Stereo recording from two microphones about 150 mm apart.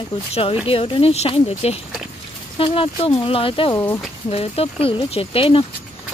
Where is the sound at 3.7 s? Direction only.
20° left (ahead or behind).